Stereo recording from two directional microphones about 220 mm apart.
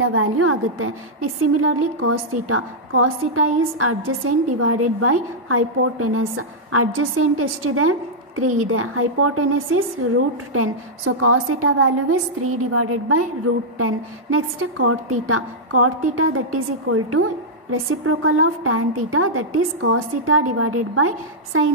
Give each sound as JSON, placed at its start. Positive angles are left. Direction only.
{"t": 0.0, "sound": "a woman's voice", "side_deg": -75}